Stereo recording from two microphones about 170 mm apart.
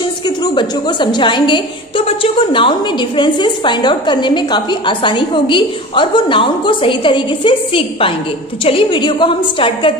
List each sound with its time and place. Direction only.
0.4 s a woman's voice: 25° left (ahead or behind)